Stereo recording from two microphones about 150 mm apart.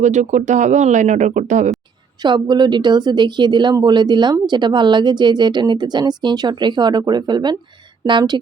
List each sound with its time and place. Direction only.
0.0 s speech: 50° right (ahead or behind)
2.2 s speech: 30° right (ahead or behind)